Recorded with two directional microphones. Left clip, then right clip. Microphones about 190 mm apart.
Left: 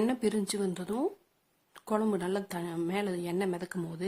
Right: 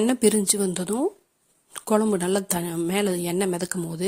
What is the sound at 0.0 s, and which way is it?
Speech, 40° right (ahead or behind).